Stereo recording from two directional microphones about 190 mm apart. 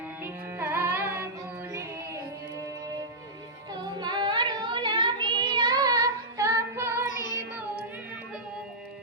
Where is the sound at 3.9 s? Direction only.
25° right (ahead or behind).